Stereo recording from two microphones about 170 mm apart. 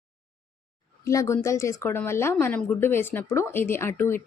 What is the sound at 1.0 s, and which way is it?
A woman's voice, 15° left (ahead or behind).